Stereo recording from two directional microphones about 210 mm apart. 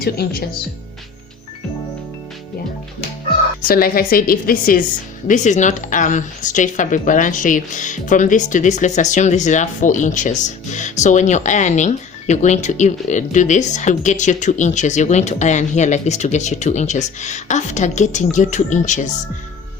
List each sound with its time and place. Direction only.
0.0 s a woman's voice: 45° left (ahead or behind)
3.7 s a woman's voice: 45° left (ahead or behind)